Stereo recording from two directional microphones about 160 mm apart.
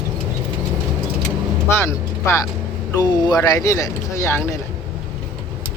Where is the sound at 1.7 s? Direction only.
15° left (ahead or behind).